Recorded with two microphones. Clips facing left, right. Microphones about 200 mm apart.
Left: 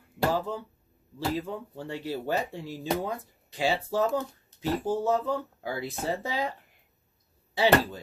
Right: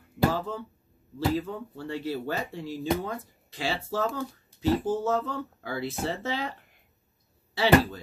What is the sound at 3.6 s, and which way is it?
Speech, 15° left (ahead or behind).